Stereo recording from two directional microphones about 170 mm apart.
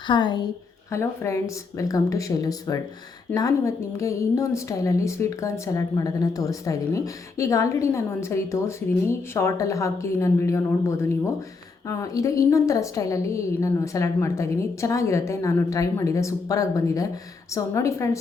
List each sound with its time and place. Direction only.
0.1 s a woman's voice: 25° left (ahead or behind)